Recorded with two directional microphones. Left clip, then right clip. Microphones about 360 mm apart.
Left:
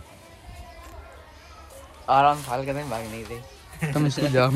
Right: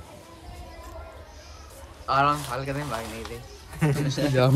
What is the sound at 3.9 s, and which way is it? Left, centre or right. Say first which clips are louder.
Speech: left 2 dB; centre.